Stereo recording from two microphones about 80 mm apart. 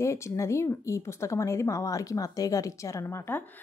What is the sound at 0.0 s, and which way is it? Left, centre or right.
A woman's voice, left.